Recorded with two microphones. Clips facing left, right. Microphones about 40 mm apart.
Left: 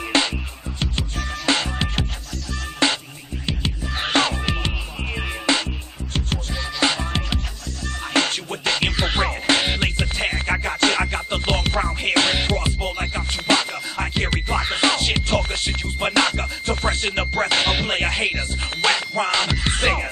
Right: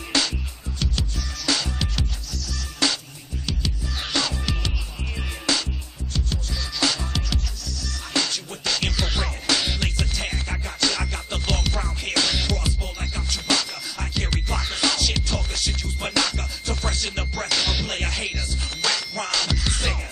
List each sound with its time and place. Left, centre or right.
0.1 s music: left
6.8 s music: left